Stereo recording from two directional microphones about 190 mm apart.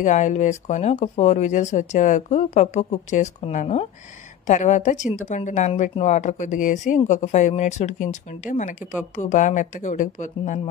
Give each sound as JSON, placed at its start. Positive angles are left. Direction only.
{"t": 0.0, "sound": "speech", "side_deg": 40}